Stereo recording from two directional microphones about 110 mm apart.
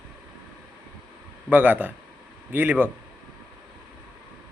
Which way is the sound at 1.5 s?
15° right (ahead or behind).